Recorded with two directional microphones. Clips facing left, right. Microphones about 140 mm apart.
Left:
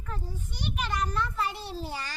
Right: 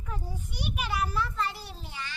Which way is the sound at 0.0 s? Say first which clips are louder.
Even; 10° right (ahead or behind).